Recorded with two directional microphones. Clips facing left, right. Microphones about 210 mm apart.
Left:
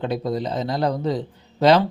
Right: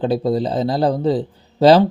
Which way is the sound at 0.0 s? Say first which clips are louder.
Right 6 dB; 30° right (ahead or behind).